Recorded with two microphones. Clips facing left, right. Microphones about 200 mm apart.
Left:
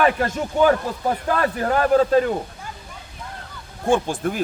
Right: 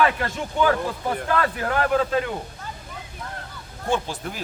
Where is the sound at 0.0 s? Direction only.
40° left (ahead or behind).